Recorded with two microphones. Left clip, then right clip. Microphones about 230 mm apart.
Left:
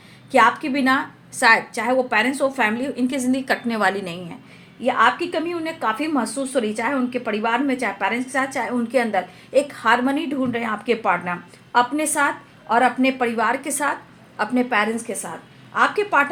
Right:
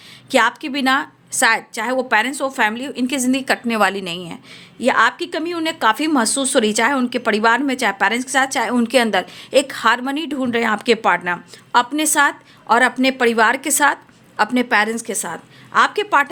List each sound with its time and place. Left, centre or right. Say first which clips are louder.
0.3 s a woman's voice: even; right